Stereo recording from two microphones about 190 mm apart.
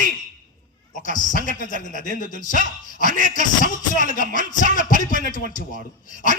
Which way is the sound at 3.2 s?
45° left (ahead or behind).